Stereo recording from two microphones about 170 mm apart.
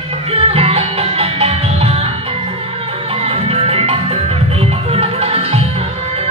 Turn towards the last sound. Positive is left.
turn(degrees=-35)  # may be behind; listen again after turning